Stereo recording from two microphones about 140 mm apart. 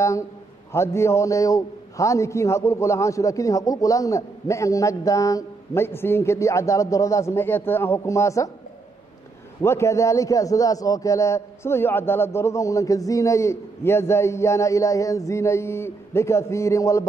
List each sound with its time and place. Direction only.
0.7 s a man's voice: 20° left (ahead or behind)
9.6 s a man's voice: 20° left (ahead or behind)